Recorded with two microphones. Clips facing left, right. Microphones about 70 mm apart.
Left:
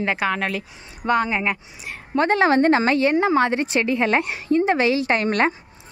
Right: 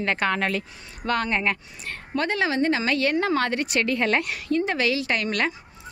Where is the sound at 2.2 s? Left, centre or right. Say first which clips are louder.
Left 7 dB; left.